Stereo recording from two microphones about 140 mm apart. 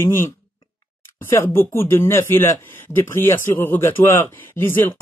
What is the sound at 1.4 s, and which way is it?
Speech, 15° left (ahead or behind).